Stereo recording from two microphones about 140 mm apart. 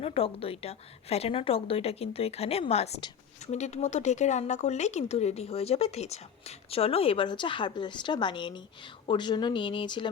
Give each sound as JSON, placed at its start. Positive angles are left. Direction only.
{"t": 0.0, "sound": "speech", "side_deg": 45}